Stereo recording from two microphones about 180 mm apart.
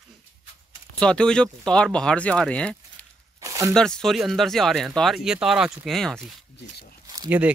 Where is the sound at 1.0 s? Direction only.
5° left (ahead or behind).